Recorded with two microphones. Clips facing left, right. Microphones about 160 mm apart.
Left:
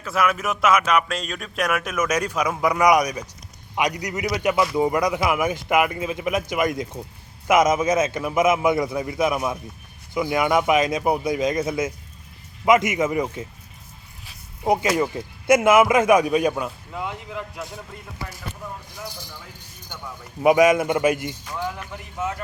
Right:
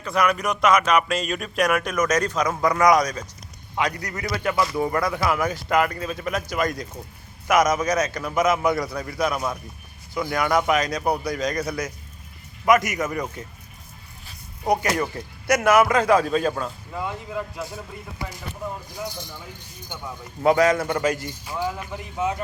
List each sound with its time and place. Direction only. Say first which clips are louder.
0.0 s a man's voice: right 1 dB; 5° left (ahead or behind); by 13.4 s 20° left (ahead or behind)
14.6 s a man's voice: left 2 dB; 20° left (ahead or behind); by 17.7 s centre (ahead or behind)
20.4 s a man's voice: left 2 dB; 15° left (ahead or behind)
21.4 s speech: right 2 dB; 10° right (ahead or behind)